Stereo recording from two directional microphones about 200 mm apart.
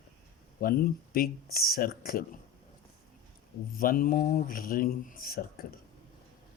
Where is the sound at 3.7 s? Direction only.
45° left (ahead or behind).